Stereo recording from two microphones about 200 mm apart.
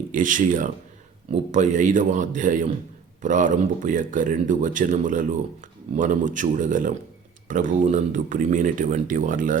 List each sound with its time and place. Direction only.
0.1 s speech: 40° right (ahead or behind)